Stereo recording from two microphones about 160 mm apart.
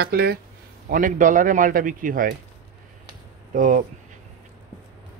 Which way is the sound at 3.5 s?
55° right (ahead or behind).